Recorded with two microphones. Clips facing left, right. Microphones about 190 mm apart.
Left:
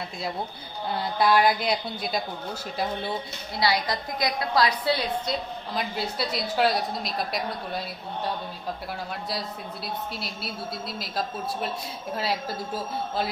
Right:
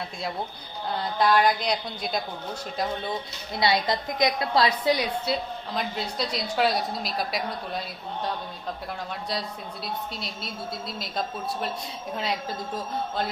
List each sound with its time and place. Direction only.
1.2 s a woman's voice: 10° left (ahead or behind)
3.5 s a woman's voice: 25° right (ahead or behind)
4.9 s a woman's voice: 5° right (ahead or behind)
9.8 s a woman's voice: 5° left (ahead or behind)
12.1 s a woman's voice: 5° left (ahead or behind)